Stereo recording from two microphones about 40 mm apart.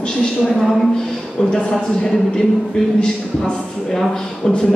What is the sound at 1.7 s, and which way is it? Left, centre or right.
Speech, centre.